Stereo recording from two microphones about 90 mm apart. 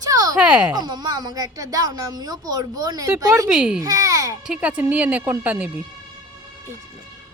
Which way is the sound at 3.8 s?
40° right (ahead or behind).